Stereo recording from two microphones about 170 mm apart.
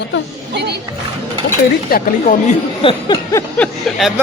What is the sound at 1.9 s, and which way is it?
Speech, 50° left (ahead or behind).